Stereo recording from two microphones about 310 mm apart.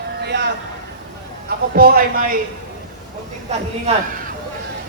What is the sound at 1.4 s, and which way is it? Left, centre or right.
Speech, right.